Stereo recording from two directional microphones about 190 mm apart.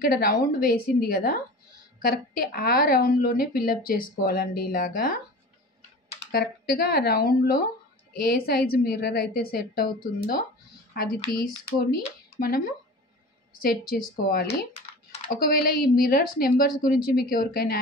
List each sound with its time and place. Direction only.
0.0 s a woman's voice: 50° left (ahead or behind)
6.3 s a woman's voice: 50° left (ahead or behind)
14.2 s a woman's voice: 55° left (ahead or behind)